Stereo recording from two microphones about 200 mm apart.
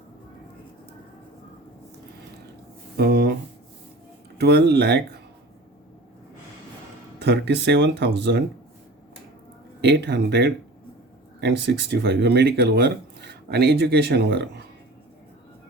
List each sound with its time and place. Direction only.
3.0 s a sound: 55° right (ahead or behind)
4.4 s speech: 55° right (ahead or behind)
7.3 s speech: 55° right (ahead or behind)
9.8 s speech: 60° right (ahead or behind)